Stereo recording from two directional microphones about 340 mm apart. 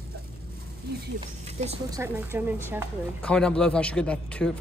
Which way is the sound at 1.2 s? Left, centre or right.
Centre.